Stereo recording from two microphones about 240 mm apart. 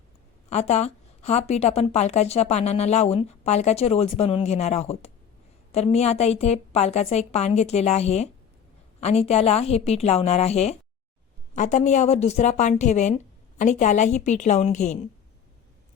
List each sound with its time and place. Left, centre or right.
0.5 s a woman's voice: left